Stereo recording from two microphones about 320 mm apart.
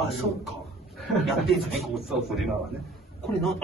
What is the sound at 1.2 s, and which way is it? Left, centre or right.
Speech, centre.